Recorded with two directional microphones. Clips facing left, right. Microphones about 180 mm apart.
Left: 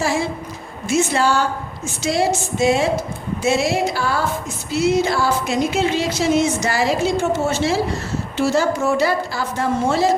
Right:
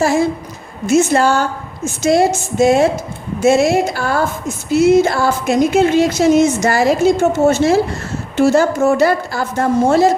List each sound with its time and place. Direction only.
0.0 s music: 45° right (ahead or behind)